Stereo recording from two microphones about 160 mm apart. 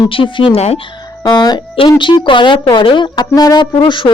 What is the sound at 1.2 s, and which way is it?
Speech, 25° left (ahead or behind).